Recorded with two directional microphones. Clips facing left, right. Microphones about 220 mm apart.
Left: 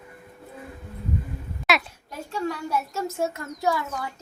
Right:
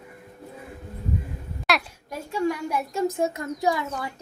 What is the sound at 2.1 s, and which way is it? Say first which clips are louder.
A woman's voice: right 4 dB; 10° right (ahead or behind).